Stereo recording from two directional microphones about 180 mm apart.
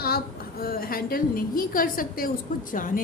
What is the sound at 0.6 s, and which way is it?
A woman's voice, 55° left (ahead or behind).